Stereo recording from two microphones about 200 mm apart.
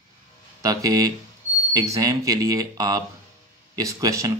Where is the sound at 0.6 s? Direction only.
20° right (ahead or behind).